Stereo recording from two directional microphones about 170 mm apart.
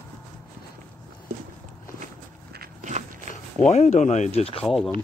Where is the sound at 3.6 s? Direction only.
45° left (ahead or behind).